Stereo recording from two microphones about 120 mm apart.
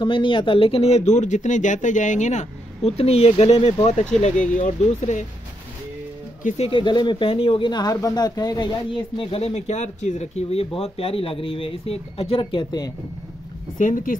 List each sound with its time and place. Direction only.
0.0 s speech: 45° left (ahead or behind); by 5.2 s 75° left (ahead or behind)
6.4 s speech: 60° left (ahead or behind); by 12.9 s 40° left (ahead or behind)
13.7 s speech: 90° left